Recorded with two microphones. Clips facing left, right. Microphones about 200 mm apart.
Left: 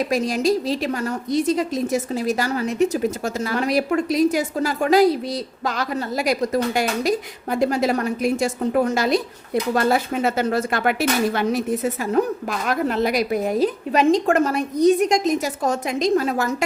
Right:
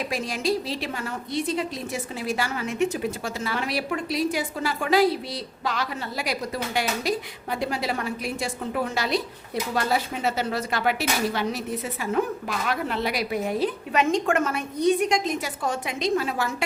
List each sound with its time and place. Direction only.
0.0 s a woman's voice: 40° left (ahead or behind)